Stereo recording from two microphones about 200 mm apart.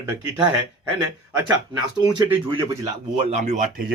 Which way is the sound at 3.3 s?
35° right (ahead or behind).